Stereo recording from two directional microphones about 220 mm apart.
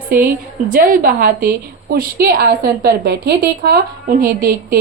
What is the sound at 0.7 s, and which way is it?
A woman's voice, 40° right (ahead or behind).